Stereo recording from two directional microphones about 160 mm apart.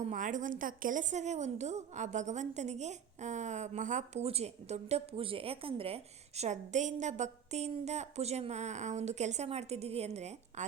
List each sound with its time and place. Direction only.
0.1 s a woman's voice: 55° right (ahead or behind)